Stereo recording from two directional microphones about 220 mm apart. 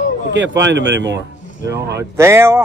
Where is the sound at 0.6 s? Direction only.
55° right (ahead or behind).